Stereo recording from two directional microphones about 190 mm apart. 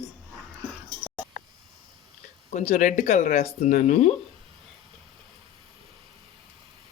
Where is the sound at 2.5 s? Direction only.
40° left (ahead or behind).